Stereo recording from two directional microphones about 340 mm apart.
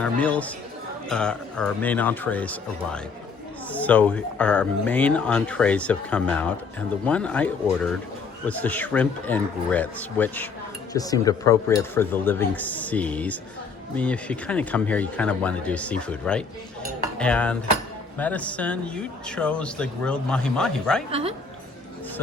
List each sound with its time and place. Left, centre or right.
0.0 s speech: centre
21.1 s speech: centre